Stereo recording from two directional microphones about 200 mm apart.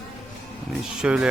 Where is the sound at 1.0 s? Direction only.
5° right (ahead or behind).